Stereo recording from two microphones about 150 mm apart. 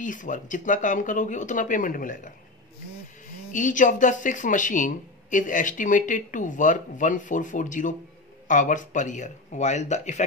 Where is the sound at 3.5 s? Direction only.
60° left (ahead or behind).